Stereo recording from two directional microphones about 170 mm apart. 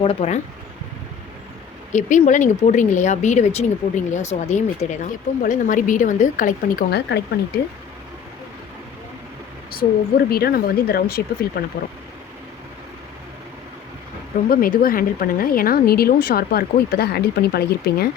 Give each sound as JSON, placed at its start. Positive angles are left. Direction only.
{"t": 0.0, "sound": "speech", "side_deg": 35}
{"t": 1.9, "sound": "speech", "side_deg": 45}
{"t": 9.7, "sound": "speech", "side_deg": 65}
{"t": 14.5, "sound": "speech", "side_deg": 60}